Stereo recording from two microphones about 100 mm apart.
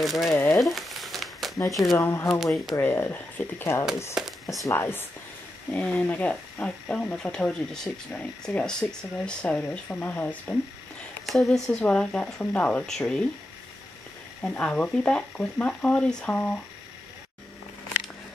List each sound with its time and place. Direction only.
0.0 s speech: centre (ahead or behind)
0.3 s speech: 20° left (ahead or behind)
0.6 s crumpling: centre (ahead or behind)
1.7 s speech: centre (ahead or behind)
2.0 s speech: 25° left (ahead or behind)
2.2 s speech: centre (ahead or behind)
2.7 s speech: 20° left (ahead or behind)
4.1 s a sound: centre (ahead or behind)
4.6 s speech: 25° left (ahead or behind)
5.7 s speech: 10° left (ahead or behind)
11.2 s speech: centre (ahead or behind)
14.4 s speech: 10° left (ahead or behind)